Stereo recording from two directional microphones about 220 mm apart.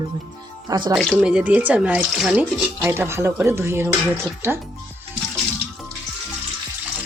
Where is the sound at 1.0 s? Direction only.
Centre (ahead or behind).